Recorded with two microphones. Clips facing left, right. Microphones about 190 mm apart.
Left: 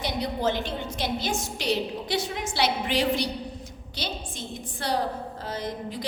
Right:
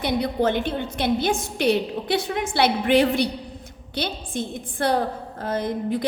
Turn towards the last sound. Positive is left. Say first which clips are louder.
# right 8 dB
turn(degrees=-55)  # may be behind; listen again after turning